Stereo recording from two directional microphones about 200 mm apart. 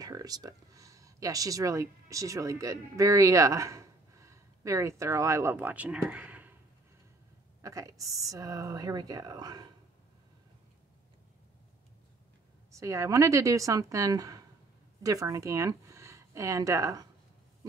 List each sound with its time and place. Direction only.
0.0 s speech: 20° right (ahead or behind)
7.6 s speech: 15° right (ahead or behind)
12.7 s speech: 15° right (ahead or behind)